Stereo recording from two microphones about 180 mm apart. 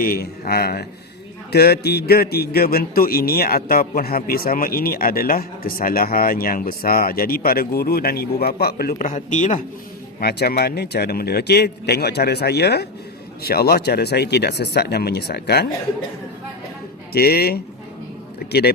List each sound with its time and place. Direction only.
0.0 s a man's voice: 55° left (ahead or behind)
10.2 s a man's voice: 60° left (ahead or behind)
17.1 s a man's voice: 60° left (ahead or behind)